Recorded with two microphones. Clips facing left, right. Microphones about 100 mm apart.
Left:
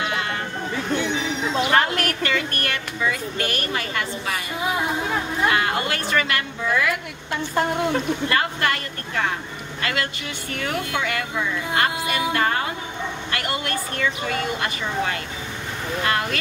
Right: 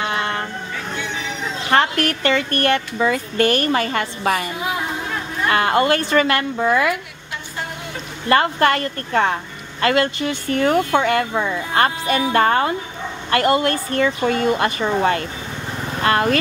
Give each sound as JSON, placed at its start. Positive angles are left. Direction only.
{"t": 0.0, "sound": "a sound", "side_deg": -35}
{"t": 2.2, "sound": "a woman's voice", "side_deg": -30}
{"t": 4.7, "sound": "music", "side_deg": 20}
{"t": 5.5, "sound": "speech", "side_deg": -40}
{"t": 8.3, "sound": "speech", "side_deg": -40}